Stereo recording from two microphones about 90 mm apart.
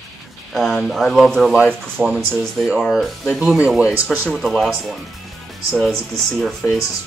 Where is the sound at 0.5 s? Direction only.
Centre (ahead or behind).